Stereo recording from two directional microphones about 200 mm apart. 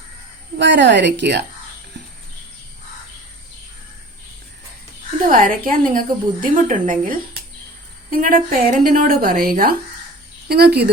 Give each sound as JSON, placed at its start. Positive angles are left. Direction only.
{"t": 0.6, "sound": "speech", "side_deg": -60}
{"t": 5.2, "sound": "a woman's voice", "side_deg": -45}